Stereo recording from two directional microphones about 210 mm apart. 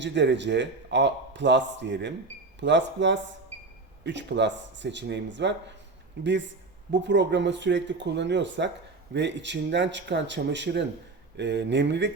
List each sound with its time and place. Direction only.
0.0 s a man's voice: 55° right (ahead or behind)